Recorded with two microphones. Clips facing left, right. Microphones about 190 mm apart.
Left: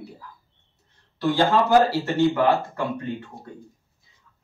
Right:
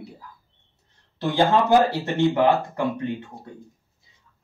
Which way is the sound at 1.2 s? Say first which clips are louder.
Even; 15° right (ahead or behind).